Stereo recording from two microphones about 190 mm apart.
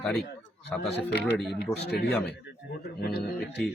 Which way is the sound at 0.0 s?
Centre (ahead or behind).